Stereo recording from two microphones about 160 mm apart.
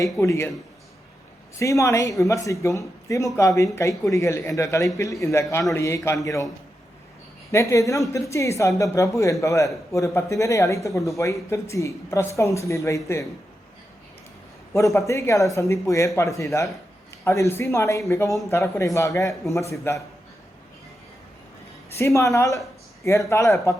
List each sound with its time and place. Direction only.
0.0 s speech: 20° left (ahead or behind)
1.5 s a woman's voice: 20° left (ahead or behind)
7.5 s a woman's voice: 20° left (ahead or behind)
14.7 s a woman's voice: 20° left (ahead or behind)
21.9 s a woman's voice: 20° left (ahead or behind)